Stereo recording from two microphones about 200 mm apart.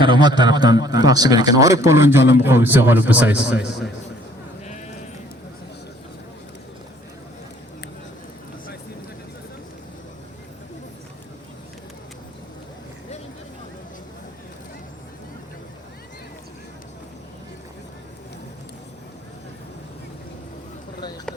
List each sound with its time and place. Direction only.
0.0 s a man's voice: 25° right (ahead or behind); by 3.9 s centre (ahead or behind)